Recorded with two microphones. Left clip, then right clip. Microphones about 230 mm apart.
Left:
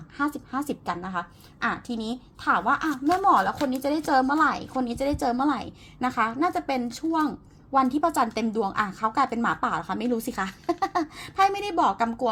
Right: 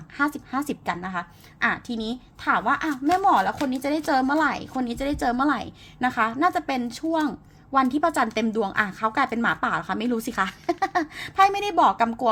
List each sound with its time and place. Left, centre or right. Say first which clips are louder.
0.2 s a woman's voice: right 3 dB; right